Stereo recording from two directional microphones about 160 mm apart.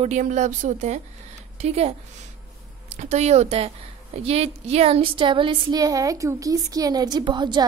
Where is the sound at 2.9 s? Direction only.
45° right (ahead or behind).